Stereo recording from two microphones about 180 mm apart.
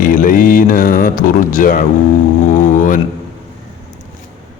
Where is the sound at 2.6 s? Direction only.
45° left (ahead or behind).